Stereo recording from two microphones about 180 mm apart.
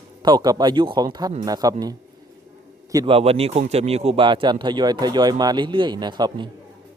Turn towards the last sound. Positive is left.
turn(degrees=-25)  # may be behind; listen again after turning